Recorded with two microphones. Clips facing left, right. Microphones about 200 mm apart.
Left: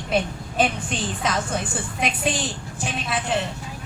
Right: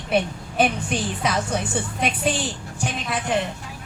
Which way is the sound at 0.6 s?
10° right (ahead or behind).